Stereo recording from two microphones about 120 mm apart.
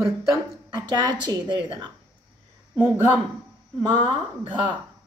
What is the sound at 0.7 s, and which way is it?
A woman's voice, 35° right (ahead or behind).